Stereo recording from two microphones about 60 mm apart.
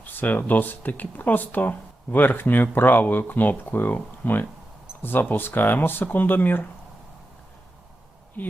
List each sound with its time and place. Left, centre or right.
0.0 s speech: left